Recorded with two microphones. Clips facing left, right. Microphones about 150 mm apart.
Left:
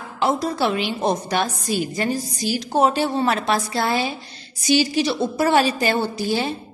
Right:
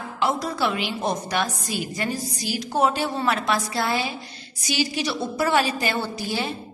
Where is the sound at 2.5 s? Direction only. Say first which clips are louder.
Left 3 dB; 25° left (ahead or behind).